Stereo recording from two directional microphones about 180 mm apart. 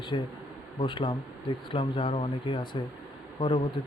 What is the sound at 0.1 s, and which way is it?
Speech, 30° left (ahead or behind).